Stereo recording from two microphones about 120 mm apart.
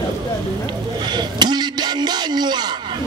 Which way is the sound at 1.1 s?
35° right (ahead or behind).